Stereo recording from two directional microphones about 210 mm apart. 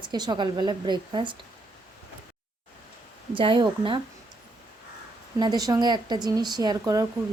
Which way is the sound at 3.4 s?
25° right (ahead or behind).